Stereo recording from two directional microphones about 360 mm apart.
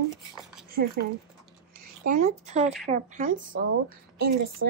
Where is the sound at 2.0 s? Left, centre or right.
Centre.